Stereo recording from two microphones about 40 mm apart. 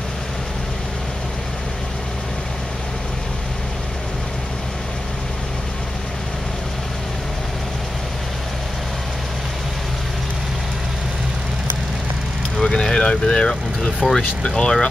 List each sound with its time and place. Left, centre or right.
12.5 s vehicle: left
14.0 s speech: centre
14.6 s speech: left